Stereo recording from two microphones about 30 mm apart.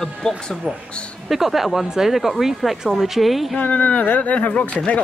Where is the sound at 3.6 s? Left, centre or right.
Left.